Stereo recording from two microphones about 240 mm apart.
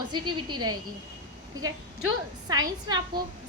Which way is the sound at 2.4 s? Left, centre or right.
Centre.